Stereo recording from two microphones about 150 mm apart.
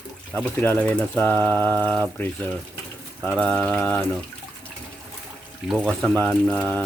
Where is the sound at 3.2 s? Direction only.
5° left (ahead or behind).